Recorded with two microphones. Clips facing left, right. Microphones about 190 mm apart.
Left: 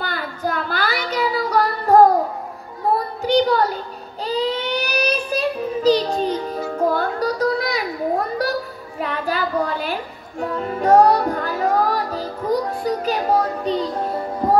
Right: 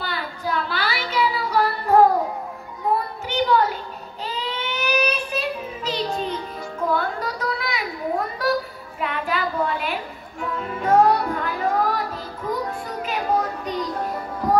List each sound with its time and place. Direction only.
0.0 s child singing: 45° left (ahead or behind)
3.3 s child singing: 40° left (ahead or behind)
9.0 s child singing: 40° left (ahead or behind)
10.4 s music: 40° left (ahead or behind)